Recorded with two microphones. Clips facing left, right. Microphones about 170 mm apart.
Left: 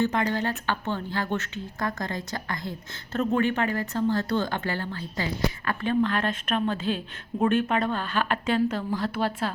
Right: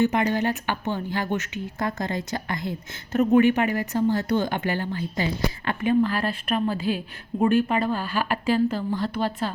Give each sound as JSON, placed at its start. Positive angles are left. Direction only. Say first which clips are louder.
{"t": 0.0, "sound": "a woman's voice", "louder": "right 3 dB", "side_deg": -20}